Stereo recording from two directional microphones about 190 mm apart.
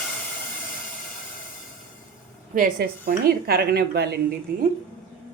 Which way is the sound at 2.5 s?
50° right (ahead or behind).